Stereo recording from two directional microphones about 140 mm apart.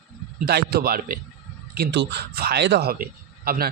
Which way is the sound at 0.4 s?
90° right.